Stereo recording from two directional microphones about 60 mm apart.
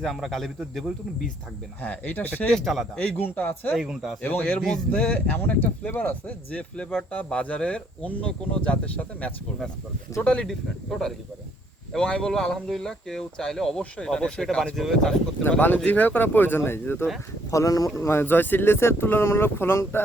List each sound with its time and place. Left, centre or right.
0.0 s speech: centre
1.8 s speech: left
2.5 s speech: centre
3.0 s speech: left
3.8 s speech: centre
4.2 s speech: left
4.7 s speech: centre
5.3 s speech: left
10.4 s speech: centre
15.4 s speech: left
17.5 s speech: left
17.9 s speech: left